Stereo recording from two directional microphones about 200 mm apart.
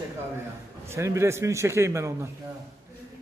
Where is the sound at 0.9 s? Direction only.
15° right (ahead or behind).